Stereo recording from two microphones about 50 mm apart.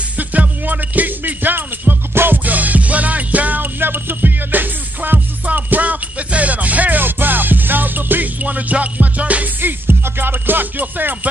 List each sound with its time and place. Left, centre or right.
0.2 s music: right
3.8 s music: right
9.6 s music: right